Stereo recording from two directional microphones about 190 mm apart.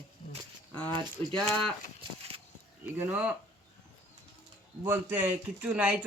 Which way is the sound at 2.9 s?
10° right (ahead or behind).